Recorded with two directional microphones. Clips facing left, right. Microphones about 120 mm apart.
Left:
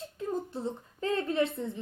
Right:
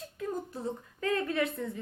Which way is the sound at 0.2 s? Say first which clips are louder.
Left 2 dB; 25° left (ahead or behind).